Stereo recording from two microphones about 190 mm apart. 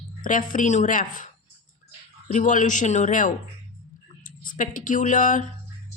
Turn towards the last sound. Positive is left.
turn(degrees=45)  # may be behind; listen again after turning